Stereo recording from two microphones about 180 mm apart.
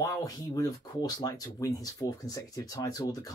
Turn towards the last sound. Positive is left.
turn(degrees=20)  # may be behind; listen again after turning